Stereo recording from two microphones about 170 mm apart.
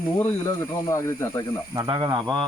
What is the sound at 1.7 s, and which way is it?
Speech, 25° right (ahead or behind).